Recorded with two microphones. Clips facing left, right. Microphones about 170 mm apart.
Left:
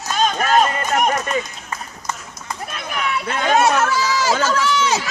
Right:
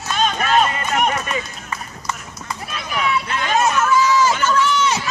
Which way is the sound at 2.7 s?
55° left (ahead or behind).